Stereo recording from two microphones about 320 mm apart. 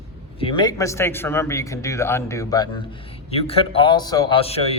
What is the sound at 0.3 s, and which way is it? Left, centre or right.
Speech, centre.